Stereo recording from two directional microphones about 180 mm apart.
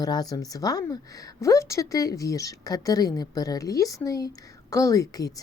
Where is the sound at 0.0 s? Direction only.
20° left (ahead or behind).